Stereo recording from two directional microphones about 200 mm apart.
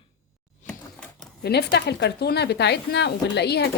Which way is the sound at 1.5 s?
55° left (ahead or behind).